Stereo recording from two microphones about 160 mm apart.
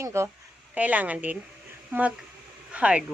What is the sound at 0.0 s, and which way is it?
Speech, 15° right (ahead or behind).